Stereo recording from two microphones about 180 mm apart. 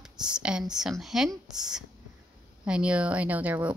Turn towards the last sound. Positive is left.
turn(degrees=-10)  # may be behind; listen again after turning